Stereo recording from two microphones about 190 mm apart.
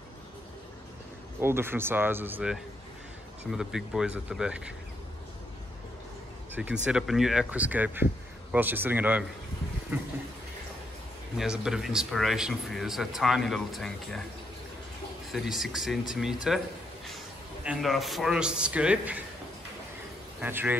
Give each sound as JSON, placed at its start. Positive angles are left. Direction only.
{"t": 1.4, "sound": "speech", "side_deg": -10}
{"t": 6.5, "sound": "speech", "side_deg": -10}
{"t": 11.3, "sound": "speech", "side_deg": -5}
{"t": 15.3, "sound": "speech", "side_deg": 0}
{"t": 17.6, "sound": "speech", "side_deg": 0}
{"t": 20.3, "sound": "speech", "side_deg": -10}